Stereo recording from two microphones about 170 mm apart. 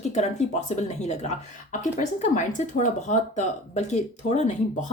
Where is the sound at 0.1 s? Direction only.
40° left (ahead or behind).